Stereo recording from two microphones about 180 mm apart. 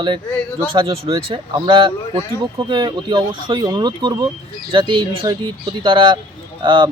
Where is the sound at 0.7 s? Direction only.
30° right (ahead or behind).